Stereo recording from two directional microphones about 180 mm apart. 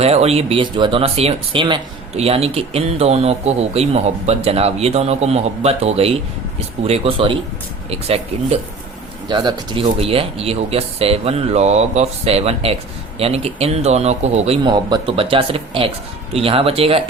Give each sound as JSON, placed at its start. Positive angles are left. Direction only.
{"t": 0.0, "sound": "speech", "side_deg": -35}
{"t": 9.3, "sound": "speech", "side_deg": -25}